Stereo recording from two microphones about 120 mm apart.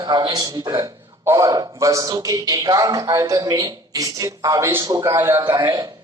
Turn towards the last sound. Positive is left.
turn(degrees=-35)  # may be behind; listen again after turning